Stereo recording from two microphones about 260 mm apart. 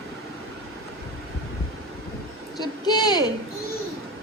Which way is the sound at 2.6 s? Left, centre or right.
Centre.